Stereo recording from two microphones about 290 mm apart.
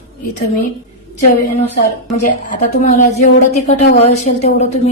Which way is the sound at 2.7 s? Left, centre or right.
Left.